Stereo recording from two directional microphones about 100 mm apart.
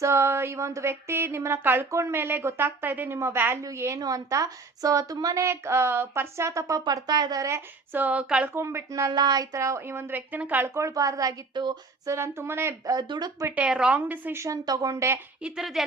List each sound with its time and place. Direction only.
0.0 s a woman's voice: 25° right (ahead or behind)
7.9 s speech: 15° right (ahead or behind)
8.5 s speech: 30° right (ahead or behind)
10.8 s a woman's voice: 30° right (ahead or behind)
12.0 s speech: 25° right (ahead or behind)
12.8 s a woman's voice: 35° right (ahead or behind)
13.6 s speech: 10° right (ahead or behind)
14.0 s speech: 20° right (ahead or behind)
14.4 s a woman's voice: 35° right (ahead or behind)
15.4 s a woman's voice: 5° right (ahead or behind)